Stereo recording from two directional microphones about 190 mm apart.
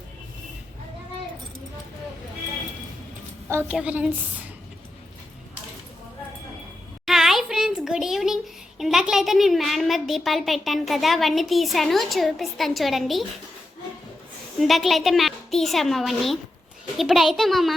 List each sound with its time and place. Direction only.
3.5 s a woman's voice: 10° right (ahead or behind)
7.0 s a sound: centre (ahead or behind)
8.8 s a woman's voice: centre (ahead or behind)
14.6 s a woman's voice: centre (ahead or behind)